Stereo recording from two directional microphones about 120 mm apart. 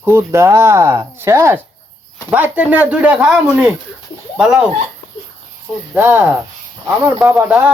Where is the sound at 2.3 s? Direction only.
10° right (ahead or behind).